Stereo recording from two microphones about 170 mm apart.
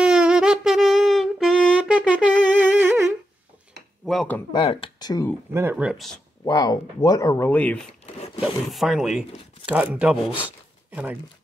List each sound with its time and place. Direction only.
0.0 s music: 5° right (ahead or behind)
2.5 s humming: 15° right (ahead or behind)
4.0 s a sound: centre (ahead or behind)
4.5 s speech: 30° left (ahead or behind)
5.5 s speech: 15° right (ahead or behind)
6.4 s speech: 20° left (ahead or behind)
8.4 s speech: centre (ahead or behind)